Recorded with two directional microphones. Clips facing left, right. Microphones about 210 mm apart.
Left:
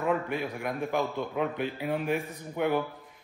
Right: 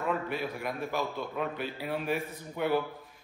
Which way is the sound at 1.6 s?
15° left (ahead or behind).